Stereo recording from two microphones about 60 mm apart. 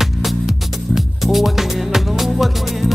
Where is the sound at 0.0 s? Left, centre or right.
Centre.